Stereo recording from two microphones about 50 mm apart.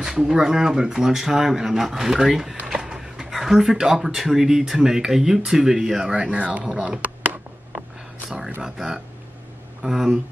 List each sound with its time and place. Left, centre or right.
0.0 s speech: centre
6.1 s speech: right
8.6 s speech: centre